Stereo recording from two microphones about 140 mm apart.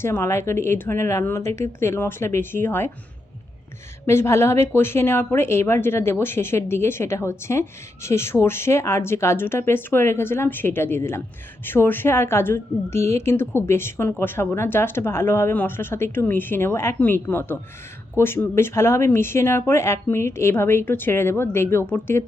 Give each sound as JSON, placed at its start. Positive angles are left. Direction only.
{"t": 0.0, "sound": "speech", "side_deg": 20}
{"t": 4.0, "sound": "speech", "side_deg": 20}